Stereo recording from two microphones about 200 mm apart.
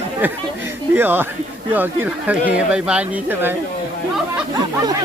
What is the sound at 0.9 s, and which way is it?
Speech, 10° right (ahead or behind).